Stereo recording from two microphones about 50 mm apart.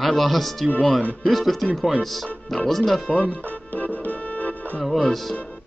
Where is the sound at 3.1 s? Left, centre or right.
Left.